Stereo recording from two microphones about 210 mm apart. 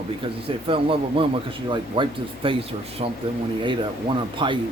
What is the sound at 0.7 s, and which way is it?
A man's voice, 25° right (ahead or behind).